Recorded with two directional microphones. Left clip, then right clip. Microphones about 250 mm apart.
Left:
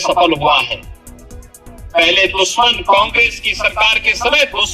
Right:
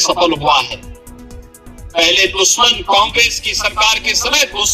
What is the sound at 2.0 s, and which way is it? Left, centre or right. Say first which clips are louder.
Speech: even; centre.